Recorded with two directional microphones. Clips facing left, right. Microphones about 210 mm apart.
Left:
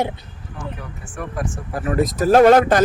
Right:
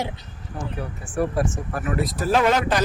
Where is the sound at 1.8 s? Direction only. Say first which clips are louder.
Left 7 dB; 45° left (ahead or behind).